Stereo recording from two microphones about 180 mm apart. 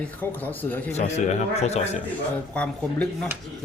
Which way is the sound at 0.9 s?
40° left (ahead or behind).